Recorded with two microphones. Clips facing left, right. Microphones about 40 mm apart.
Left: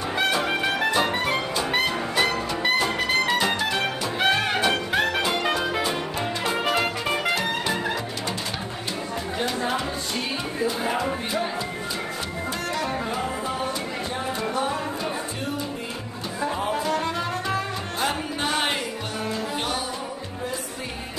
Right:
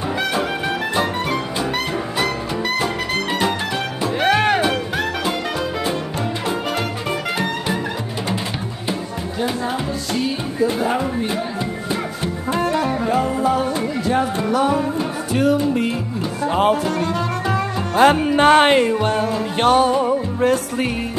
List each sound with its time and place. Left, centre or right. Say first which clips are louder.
0.4 s music: right 2 dB; centre
3.3 s music: right 2 dB; centre
4.3 s music: right 8 dB; right
6.7 s music: right 1 dB; centre
7.3 s music: right 3 dB; centre
12.5 s music: right 9 dB; right
14.0 s music: right 10 dB; right
17.9 s music: right 15 dB; right